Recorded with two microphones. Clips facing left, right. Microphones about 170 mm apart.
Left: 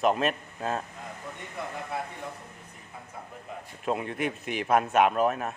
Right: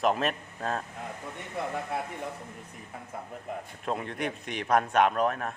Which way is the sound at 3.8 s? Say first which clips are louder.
Left 3 dB; 5° left (ahead or behind).